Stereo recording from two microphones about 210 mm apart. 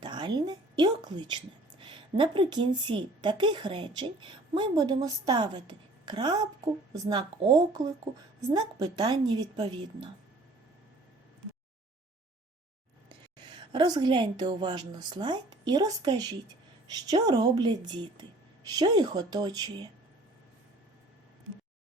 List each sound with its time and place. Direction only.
0.0 s a woman's voice: 20° right (ahead or behind)
13.5 s a woman's voice: 20° right (ahead or behind)